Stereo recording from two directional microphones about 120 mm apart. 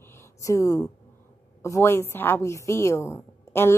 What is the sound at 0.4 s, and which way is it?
A woman's voice, 25° left (ahead or behind).